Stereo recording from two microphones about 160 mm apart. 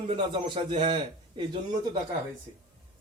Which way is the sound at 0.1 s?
30° right (ahead or behind).